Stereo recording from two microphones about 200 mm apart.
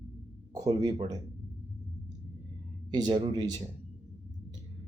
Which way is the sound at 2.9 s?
20° right (ahead or behind).